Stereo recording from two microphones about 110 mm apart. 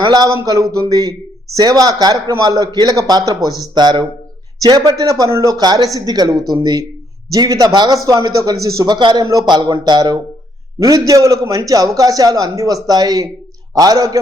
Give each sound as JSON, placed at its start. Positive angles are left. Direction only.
{"t": 0.0, "sound": "a man's voice", "side_deg": -40}